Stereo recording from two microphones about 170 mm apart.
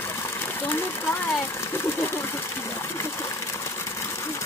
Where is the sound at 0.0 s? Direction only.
15° left (ahead or behind).